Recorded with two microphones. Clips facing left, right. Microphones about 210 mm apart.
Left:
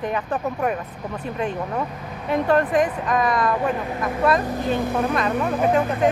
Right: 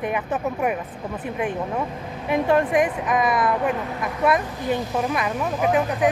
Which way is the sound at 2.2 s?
10° right (ahead or behind).